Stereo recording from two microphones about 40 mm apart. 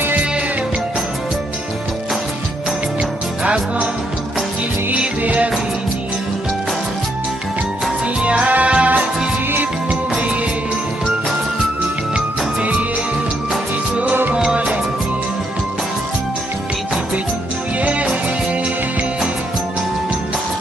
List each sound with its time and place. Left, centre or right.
5.2 s music: right
8.2 s music: right
9.5 s music: right
14.5 s music: right